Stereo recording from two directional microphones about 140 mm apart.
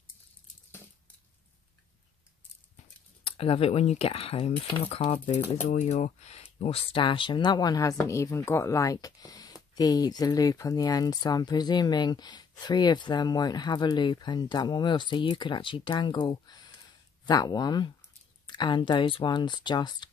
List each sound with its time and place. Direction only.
3.3 s speech: 45° left (ahead or behind)
5.7 s speech: 55° left (ahead or behind); by 20.1 s 30° left (ahead or behind)